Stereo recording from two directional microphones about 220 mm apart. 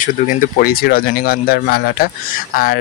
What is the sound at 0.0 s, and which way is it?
Speech, 40° left (ahead or behind).